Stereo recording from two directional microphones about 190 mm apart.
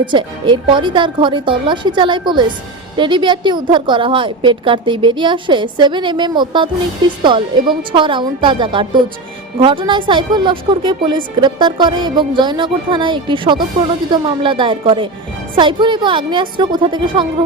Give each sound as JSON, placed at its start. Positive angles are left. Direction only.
{"t": 0.0, "sound": "a woman's voice", "side_deg": -25}